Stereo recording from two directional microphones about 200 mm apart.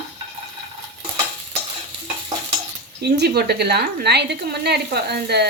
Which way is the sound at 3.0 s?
55° right (ahead or behind).